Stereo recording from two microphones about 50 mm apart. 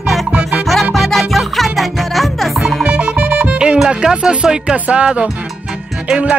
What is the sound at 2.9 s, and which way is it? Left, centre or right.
Music, right.